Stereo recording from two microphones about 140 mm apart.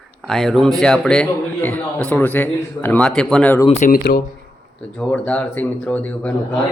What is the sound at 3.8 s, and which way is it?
Speech, 80° left.